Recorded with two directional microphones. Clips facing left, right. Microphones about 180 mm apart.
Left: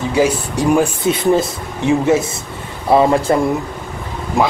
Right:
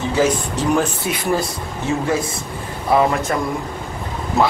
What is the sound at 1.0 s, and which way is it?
Speech, 25° left (ahead or behind).